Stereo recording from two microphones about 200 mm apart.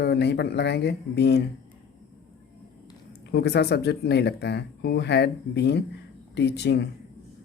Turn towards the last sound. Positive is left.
turn(degrees=55)  # may be behind; listen again after turning